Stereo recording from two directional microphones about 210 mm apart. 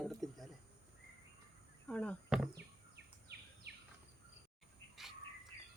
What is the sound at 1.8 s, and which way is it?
Speech, 5° left (ahead or behind).